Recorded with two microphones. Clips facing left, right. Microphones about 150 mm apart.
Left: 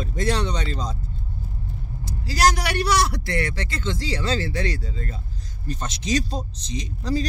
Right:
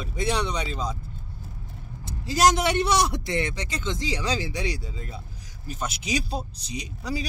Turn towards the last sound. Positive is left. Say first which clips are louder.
# left 5 dB
turn(degrees=-10)  # may be behind; listen again after turning